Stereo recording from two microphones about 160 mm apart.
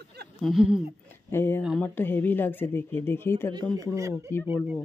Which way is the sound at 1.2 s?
15° left (ahead or behind).